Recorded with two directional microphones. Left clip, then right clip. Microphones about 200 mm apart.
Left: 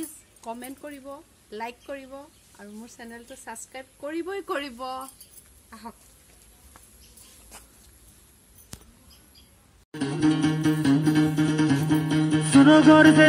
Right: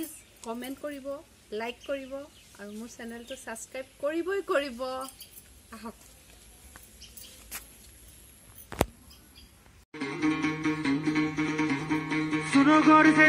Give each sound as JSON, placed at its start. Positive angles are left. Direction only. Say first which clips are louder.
{"t": 0.5, "sound": "speech", "louder": "even", "side_deg": 25}
{"t": 2.6, "sound": "speech", "louder": "right 1 dB", "side_deg": 25}
{"t": 9.9, "sound": "music", "louder": "left 5 dB", "side_deg": 40}